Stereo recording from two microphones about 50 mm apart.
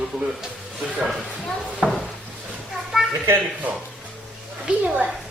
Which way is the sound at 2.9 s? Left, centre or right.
Centre.